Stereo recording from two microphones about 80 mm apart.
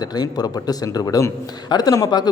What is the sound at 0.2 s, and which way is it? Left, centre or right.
A man's voice, left.